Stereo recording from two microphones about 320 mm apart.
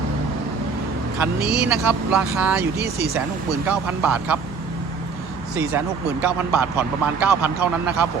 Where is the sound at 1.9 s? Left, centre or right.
Centre.